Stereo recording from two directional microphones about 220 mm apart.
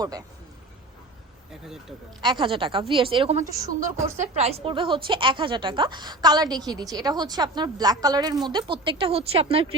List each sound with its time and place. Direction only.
0.0 s a man's voice: 15° right (ahead or behind)
2.2 s a woman's voice: 20° right (ahead or behind)